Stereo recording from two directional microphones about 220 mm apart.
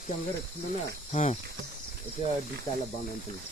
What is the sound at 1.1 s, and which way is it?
Speech, 30° left (ahead or behind).